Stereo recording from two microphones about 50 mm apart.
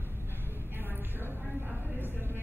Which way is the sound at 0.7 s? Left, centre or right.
Right.